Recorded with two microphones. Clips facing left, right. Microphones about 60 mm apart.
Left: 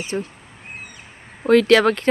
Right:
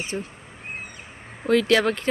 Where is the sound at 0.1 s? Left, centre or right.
Left.